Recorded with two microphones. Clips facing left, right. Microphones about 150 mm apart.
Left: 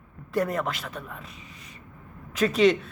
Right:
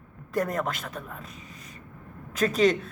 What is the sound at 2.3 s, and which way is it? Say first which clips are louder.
Speech: left 2 dB; 45° right (ahead or behind).